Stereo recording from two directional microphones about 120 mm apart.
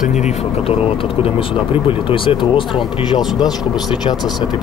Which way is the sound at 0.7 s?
50° left (ahead or behind).